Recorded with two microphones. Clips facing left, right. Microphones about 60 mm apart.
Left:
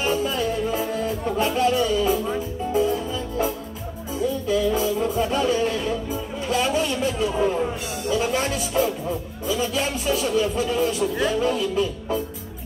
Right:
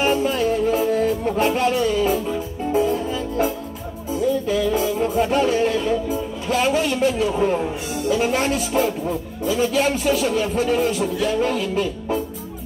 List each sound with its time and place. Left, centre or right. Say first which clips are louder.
0.0 s music: right 4 dB; right
4.5 s music: right 1 dB; right
6.5 s speech: right 3 dB; right